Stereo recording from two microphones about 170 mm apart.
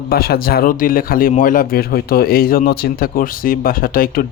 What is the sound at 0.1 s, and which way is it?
Speech, 65° left (ahead or behind).